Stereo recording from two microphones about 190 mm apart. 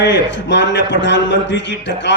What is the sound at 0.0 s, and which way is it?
A man's voice, 70° left (ahead or behind).